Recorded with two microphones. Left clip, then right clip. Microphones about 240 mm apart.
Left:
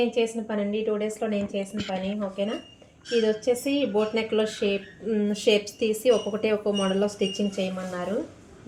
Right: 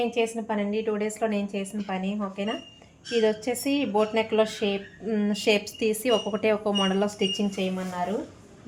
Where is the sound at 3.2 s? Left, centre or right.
Right.